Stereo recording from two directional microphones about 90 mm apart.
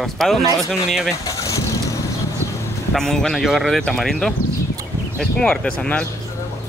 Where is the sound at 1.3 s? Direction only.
40° left (ahead or behind).